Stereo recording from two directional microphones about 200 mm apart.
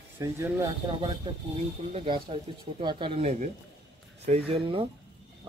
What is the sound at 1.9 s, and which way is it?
Speech, 25° right (ahead or behind).